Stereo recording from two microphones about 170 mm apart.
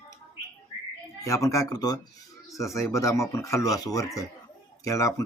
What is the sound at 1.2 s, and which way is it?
Speech, 20° left (ahead or behind).